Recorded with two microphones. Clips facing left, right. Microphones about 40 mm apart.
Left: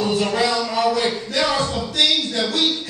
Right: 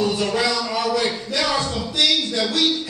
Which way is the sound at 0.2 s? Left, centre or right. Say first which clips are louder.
Left 1 dB; centre.